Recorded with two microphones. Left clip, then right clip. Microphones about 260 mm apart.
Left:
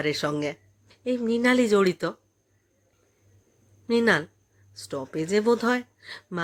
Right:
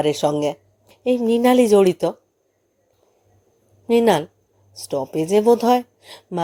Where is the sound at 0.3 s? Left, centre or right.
Centre.